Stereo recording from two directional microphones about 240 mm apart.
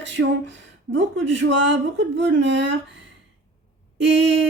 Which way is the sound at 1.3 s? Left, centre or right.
Right.